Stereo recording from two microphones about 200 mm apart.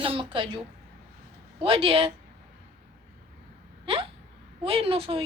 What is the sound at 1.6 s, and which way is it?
Speech, 25° right (ahead or behind).